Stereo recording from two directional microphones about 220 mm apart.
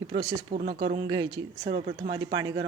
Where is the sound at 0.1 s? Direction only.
25° right (ahead or behind).